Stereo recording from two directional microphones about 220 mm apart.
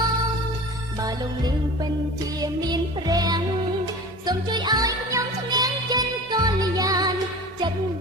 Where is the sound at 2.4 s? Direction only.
15° right (ahead or behind).